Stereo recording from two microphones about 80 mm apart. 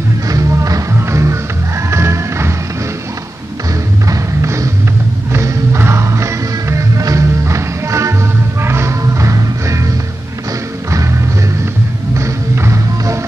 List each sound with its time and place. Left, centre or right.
0.3 s music: right
4.1 s music: right
12.2 s music: right